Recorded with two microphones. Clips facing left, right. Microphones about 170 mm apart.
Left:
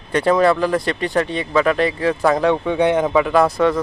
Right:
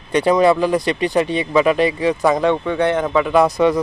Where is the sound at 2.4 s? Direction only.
10° left (ahead or behind).